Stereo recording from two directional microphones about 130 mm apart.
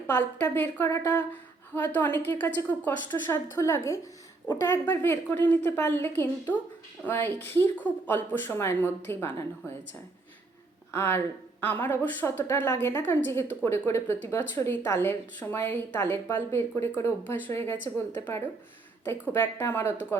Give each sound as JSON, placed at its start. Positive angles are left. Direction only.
{"t": 0.1, "sound": "a woman's voice", "side_deg": 15}